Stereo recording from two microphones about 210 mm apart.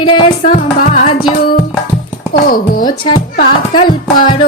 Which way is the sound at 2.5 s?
40° left (ahead or behind).